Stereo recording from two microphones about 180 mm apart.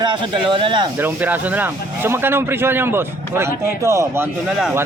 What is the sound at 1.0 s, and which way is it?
Speech, 10° right (ahead or behind).